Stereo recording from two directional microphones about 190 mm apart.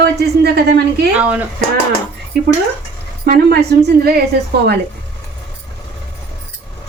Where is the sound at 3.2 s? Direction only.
55° right (ahead or behind).